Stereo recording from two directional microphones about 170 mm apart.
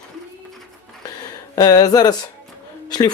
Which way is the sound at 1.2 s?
25° left (ahead or behind).